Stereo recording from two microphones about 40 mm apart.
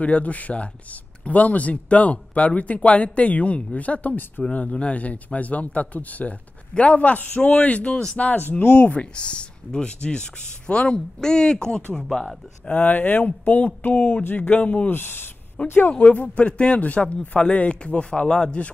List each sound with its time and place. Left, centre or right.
0.0 s speech: left
8.2 s speech: left
8.7 s speech: left
12.6 s speech: left
14.9 s speech: left
15.6 s speech: left
18.2 s speech: centre